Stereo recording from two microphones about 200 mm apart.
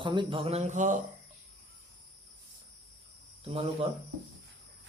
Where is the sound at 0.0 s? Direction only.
25° right (ahead or behind).